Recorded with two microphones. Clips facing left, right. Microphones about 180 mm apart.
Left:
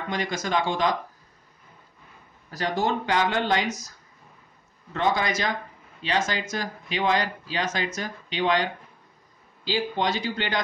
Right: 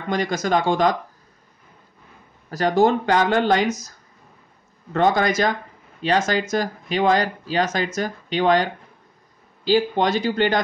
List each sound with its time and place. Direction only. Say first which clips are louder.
0.1 s speech: right 6 dB; 45° right (ahead or behind)
2.5 s speech: right 8 dB; 50° right (ahead or behind)
4.9 s speech: right 6 dB; 50° right (ahead or behind)
9.7 s speech: right 7 dB; 50° right (ahead or behind)